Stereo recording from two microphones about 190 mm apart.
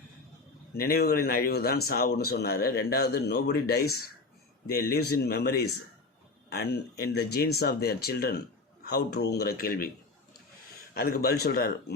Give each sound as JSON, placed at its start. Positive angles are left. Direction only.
{"t": 0.7, "sound": "speech", "side_deg": 55}
{"t": 10.9, "sound": "speech", "side_deg": 55}